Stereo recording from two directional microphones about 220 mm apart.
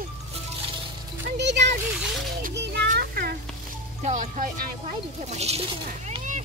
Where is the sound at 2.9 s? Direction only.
45° right (ahead or behind).